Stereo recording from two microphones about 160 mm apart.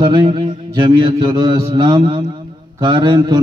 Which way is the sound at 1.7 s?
30° right (ahead or behind).